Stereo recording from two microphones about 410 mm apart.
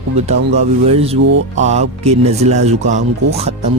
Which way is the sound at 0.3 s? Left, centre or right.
Centre.